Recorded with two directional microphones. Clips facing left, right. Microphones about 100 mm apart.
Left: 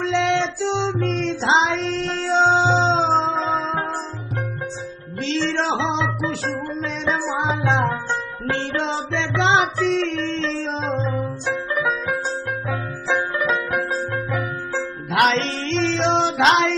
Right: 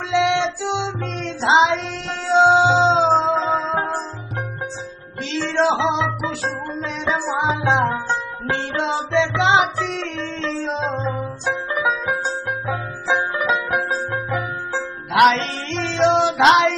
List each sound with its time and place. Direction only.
0.0 s music: 5° right (ahead or behind)
5.3 s music: 5° right (ahead or behind); by 14.8 s 20° right (ahead or behind)
15.1 s music: 5° right (ahead or behind)